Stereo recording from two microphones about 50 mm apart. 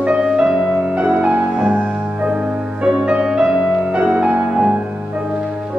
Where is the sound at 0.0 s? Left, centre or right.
Right.